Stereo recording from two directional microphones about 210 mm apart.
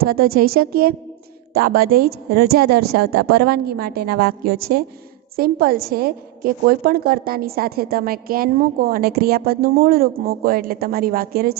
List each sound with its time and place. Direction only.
0.0 s a woman's voice: 45° right (ahead or behind)